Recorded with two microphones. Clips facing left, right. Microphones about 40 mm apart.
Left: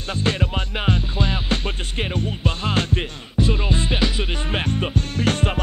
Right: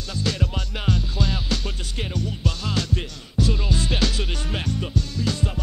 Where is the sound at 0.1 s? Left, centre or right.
Left.